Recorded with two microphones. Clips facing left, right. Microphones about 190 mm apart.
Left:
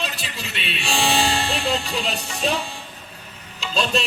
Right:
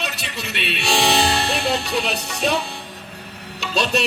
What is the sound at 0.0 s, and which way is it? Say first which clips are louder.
Music: right 1 dB; 70° right (ahead or behind).